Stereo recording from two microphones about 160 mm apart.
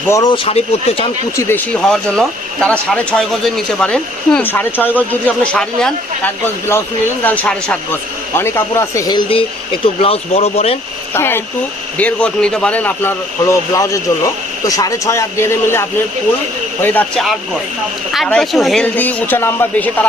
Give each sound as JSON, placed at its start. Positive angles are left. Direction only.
{"t": 0.1, "sound": "a man's voice", "side_deg": 20}
{"t": 0.4, "sound": "speech", "side_deg": 40}
{"t": 1.4, "sound": "speech", "side_deg": 15}
{"t": 11.1, "sound": "a man's voice", "side_deg": 15}